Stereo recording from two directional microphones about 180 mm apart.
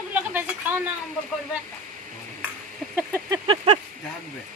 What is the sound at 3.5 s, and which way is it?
Speech, 30° right (ahead or behind).